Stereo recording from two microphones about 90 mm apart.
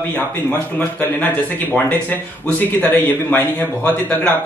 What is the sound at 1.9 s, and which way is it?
A man's voice, 20° left (ahead or behind).